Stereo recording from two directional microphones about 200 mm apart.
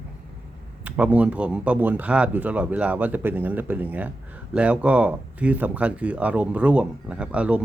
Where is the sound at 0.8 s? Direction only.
5° right (ahead or behind).